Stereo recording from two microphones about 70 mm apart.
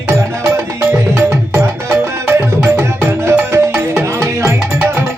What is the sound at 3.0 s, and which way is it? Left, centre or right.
Music, right.